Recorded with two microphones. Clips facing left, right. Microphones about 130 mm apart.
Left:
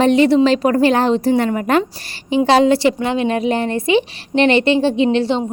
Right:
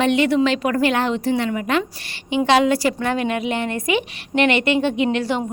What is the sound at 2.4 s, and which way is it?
Speech, 30° left (ahead or behind).